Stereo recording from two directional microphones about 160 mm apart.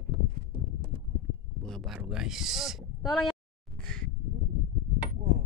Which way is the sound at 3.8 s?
5° left (ahead or behind).